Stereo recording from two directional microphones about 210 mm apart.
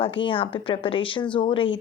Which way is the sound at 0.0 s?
25° left (ahead or behind).